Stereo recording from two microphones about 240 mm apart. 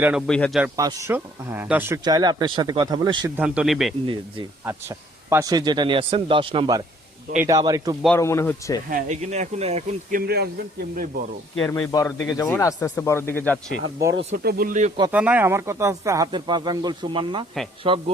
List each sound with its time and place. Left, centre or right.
0.0 s a man's voice: centre
0.6 s speech: centre
3.3 s a man's voice: centre
4.0 s a man's voice: right
4.6 s a man's voice: centre
8.0 s speech: centre
8.9 s speech: right
11.6 s speech: centre
13.8 s speech: centre
14.2 s a man's voice: right
15.1 s a man's voice: centre; by 18.0 s right